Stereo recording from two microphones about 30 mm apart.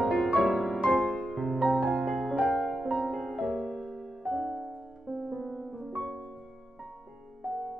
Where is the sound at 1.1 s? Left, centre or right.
Centre.